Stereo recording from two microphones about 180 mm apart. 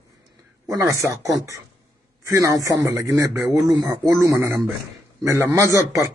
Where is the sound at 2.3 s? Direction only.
15° right (ahead or behind).